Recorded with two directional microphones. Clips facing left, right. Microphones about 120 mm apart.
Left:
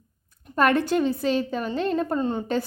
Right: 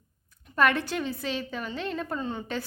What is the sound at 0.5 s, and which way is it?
A woman's voice, 40° left (ahead or behind).